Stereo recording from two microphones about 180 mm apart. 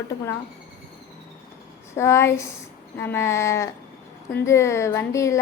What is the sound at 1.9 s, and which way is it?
A woman's voice, 15° left (ahead or behind).